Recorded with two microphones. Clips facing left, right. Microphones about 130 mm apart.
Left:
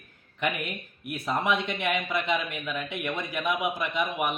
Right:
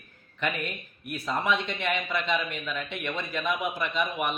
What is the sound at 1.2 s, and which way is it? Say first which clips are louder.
Speech: left 1 dB; 20° left (ahead or behind).